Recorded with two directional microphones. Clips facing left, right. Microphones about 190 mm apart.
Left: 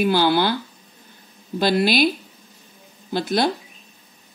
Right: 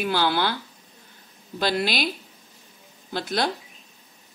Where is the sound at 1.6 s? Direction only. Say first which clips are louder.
Left 6 dB; 10° left (ahead or behind).